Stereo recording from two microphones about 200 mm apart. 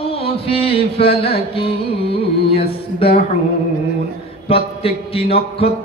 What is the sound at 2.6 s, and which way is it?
Speech, 50° left (ahead or behind).